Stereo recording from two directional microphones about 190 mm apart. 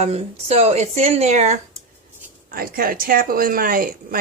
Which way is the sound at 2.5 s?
50° right (ahead or behind).